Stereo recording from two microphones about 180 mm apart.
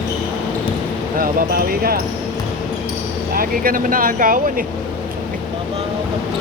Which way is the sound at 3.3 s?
55° right (ahead or behind).